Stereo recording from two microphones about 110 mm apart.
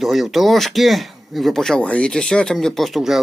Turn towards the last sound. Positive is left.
turn(degrees=0)  # may be behind; listen again after turning